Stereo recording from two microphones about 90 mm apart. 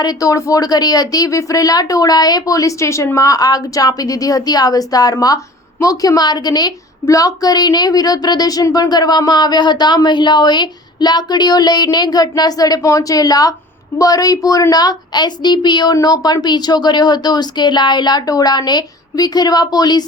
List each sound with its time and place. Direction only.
0.0 s a woman's voice: 40° left (ahead or behind)